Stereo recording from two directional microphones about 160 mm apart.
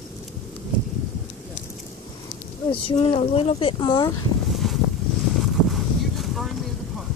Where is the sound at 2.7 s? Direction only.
35° left (ahead or behind).